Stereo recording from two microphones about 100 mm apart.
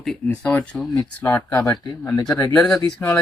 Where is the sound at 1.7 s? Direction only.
40° left (ahead or behind).